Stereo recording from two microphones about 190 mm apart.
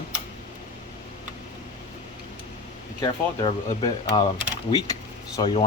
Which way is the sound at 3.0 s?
20° left (ahead or behind).